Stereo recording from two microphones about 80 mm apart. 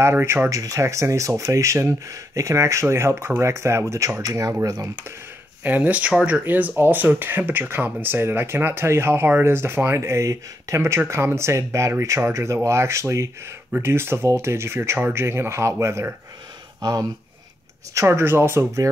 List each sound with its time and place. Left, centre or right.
0.0 s speech: right
4.2 s speech: right
5.6 s speech: right
17.9 s speech: right